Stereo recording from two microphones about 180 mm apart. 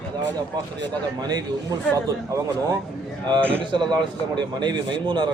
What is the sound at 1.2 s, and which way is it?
Speech, 20° right (ahead or behind).